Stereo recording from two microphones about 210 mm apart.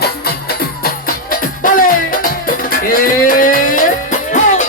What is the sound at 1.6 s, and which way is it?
Music, 40° left (ahead or behind).